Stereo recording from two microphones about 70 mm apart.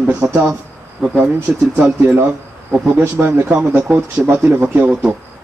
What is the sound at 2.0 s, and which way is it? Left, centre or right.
A man's voice, right.